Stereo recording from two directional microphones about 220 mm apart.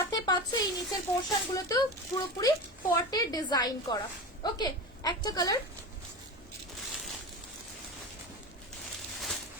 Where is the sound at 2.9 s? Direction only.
15° left (ahead or behind).